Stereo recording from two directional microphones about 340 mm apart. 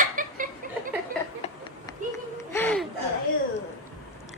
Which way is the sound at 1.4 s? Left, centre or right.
Centre.